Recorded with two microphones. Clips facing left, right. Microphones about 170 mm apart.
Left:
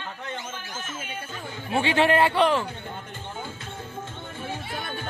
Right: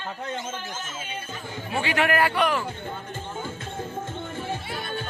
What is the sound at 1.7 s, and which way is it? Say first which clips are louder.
Speech: left 3 dB; 30° left (ahead or behind).